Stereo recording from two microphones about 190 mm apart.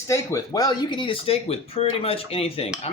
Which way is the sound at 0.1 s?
15° left (ahead or behind).